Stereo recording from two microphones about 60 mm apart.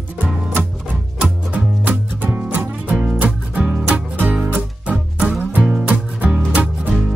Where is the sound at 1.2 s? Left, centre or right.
Right.